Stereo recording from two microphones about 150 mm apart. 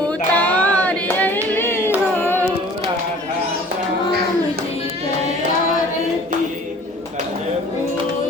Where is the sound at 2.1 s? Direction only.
15° left (ahead or behind).